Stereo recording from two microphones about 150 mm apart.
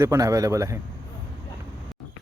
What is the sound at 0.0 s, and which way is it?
Speech, 20° right (ahead or behind).